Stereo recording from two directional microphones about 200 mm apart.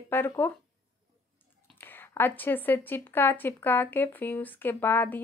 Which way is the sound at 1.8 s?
10° left (ahead or behind).